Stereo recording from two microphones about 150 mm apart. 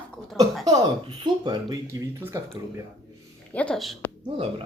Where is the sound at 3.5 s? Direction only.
5° left (ahead or behind).